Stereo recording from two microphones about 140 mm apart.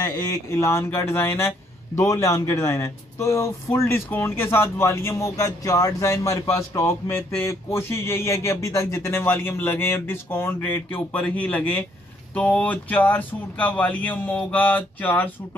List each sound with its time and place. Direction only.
0.2 s a man's voice: 20° left (ahead or behind)